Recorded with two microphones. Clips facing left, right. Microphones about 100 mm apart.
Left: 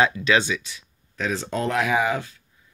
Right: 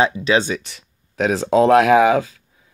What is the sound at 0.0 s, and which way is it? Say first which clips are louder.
Speech: right 3 dB; 25° right (ahead or behind).